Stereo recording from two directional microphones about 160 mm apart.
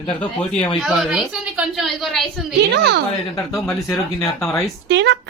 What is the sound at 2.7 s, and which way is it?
Speech, 90° right.